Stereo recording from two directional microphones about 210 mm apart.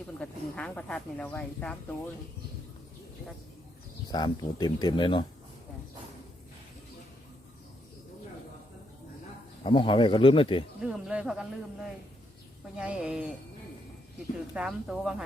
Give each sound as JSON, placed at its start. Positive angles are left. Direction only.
{"t": 0.2, "sound": "speech", "side_deg": 5}
{"t": 4.1, "sound": "speech", "side_deg": 20}
{"t": 9.6, "sound": "speech", "side_deg": 25}
{"t": 10.8, "sound": "speech", "side_deg": -5}
{"t": 14.5, "sound": "speech", "side_deg": -5}